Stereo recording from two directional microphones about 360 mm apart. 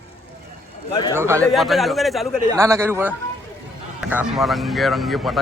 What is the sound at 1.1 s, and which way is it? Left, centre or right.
A man's voice, centre.